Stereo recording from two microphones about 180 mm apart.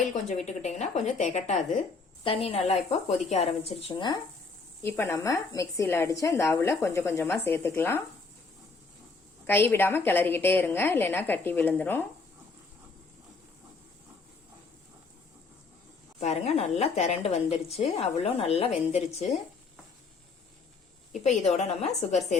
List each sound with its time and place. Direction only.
0.1 s a woman's voice: 40° left (ahead or behind)
4.8 s a woman's voice: 15° left (ahead or behind)
9.5 s a woman's voice: 10° left (ahead or behind)
16.2 s a woman's voice: 40° left (ahead or behind)
21.1 s a woman's voice: 40° left (ahead or behind)